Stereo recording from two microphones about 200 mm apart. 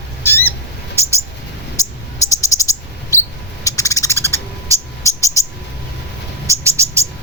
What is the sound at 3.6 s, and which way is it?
Owl, 15° left (ahead or behind).